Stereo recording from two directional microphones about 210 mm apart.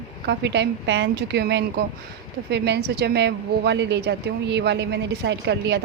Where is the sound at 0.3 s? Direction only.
55° right (ahead or behind).